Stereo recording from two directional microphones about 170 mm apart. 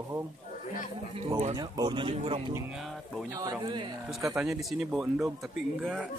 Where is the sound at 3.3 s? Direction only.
20° right (ahead or behind).